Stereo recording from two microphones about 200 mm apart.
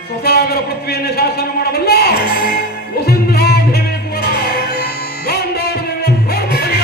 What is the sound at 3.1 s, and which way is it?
Music, 50° left (ahead or behind).